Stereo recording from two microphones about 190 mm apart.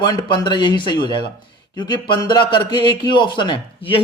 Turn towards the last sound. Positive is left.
turn(degrees=25)  # may be behind; listen again after turning